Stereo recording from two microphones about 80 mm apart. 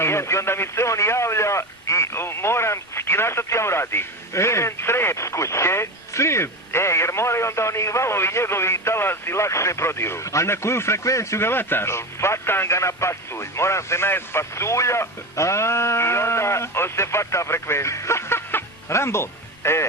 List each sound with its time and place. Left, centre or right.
0.0 s speech: left